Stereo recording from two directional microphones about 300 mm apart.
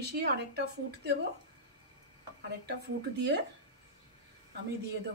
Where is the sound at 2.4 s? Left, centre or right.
Right.